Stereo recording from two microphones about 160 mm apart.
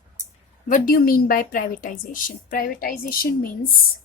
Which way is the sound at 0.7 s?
60° left (ahead or behind).